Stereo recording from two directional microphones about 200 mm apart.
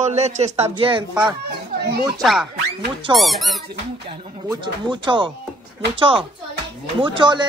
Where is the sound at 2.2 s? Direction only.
Centre (ahead or behind).